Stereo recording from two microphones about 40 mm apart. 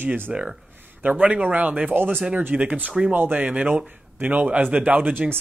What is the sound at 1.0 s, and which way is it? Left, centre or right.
Speech, right.